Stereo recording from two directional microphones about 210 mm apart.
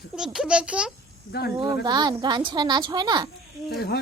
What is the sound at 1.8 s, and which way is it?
A woman's voice, 20° right (ahead or behind).